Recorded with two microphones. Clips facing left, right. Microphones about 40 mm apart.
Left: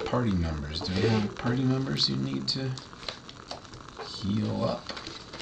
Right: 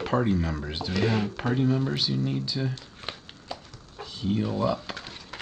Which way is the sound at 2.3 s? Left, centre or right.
Centre.